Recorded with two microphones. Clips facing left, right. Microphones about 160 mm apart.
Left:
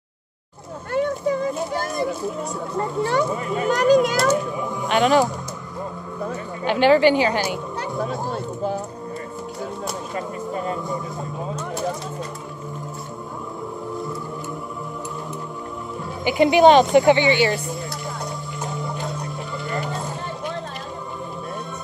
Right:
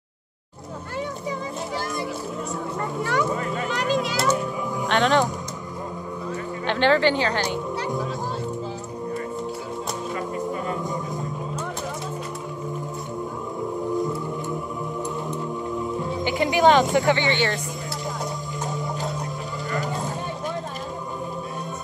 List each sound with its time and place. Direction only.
3.0 s speech: 30° left (ahead or behind)
3.6 s speech: 45° left (ahead or behind)
4.8 s speech: 5° left (ahead or behind)
6.6 s speech: 10° left (ahead or behind)
16.3 s speech: 20° left (ahead or behind)